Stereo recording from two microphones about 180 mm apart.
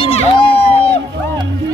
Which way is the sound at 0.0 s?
30° left (ahead or behind).